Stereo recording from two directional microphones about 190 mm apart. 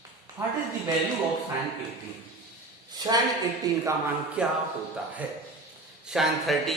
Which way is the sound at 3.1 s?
20° right (ahead or behind).